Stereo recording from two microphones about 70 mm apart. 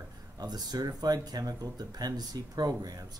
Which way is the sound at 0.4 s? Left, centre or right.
Right.